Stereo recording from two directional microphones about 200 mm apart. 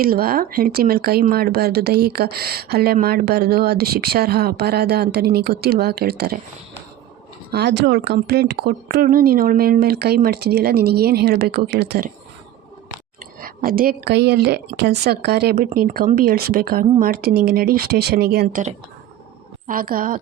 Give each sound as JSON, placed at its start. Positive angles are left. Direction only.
{"t": 0.0, "sound": "speech", "side_deg": -50}
{"t": 7.5, "sound": "speech", "side_deg": -55}
{"t": 13.4, "sound": "speech", "side_deg": -45}
{"t": 19.6, "sound": "speech", "side_deg": -45}